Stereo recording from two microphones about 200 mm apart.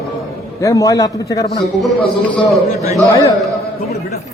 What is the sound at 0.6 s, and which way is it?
Speech, 15° left (ahead or behind).